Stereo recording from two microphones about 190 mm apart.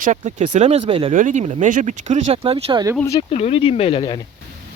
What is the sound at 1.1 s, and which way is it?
Speech, 40° right (ahead or behind).